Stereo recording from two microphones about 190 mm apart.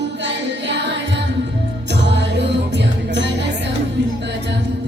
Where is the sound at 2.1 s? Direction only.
65° right (ahead or behind).